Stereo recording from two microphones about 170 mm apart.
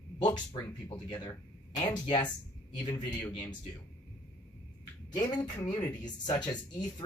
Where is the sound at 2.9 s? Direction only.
15° left (ahead or behind).